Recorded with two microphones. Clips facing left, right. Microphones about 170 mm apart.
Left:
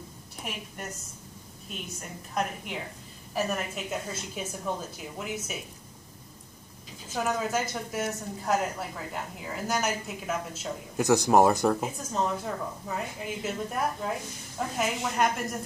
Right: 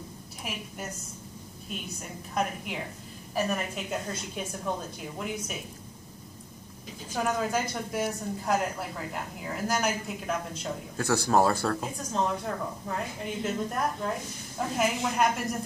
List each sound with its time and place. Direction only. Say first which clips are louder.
0.5 s a woman's voice: even; 5° right (ahead or behind)
1.7 s a woman's voice: right 1 dB; centre (ahead or behind)
7.2 s a woman's voice: even; 5° left (ahead or behind)
11.0 s speech: left 4 dB; 15° left (ahead or behind)
12.1 s a woman's voice: right 1 dB; centre (ahead or behind)